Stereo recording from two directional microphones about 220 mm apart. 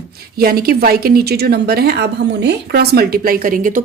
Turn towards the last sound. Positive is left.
turn(degrees=-40)  # may be behind; listen again after turning